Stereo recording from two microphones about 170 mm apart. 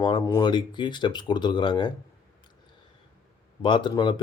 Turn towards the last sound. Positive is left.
turn(degrees=30)  # may be behind; listen again after turning